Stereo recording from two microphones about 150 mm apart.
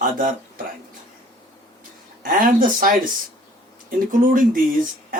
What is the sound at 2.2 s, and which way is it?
Speech, 65° right (ahead or behind).